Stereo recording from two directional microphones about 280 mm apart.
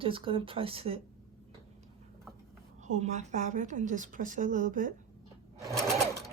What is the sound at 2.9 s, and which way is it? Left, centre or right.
Speech, right.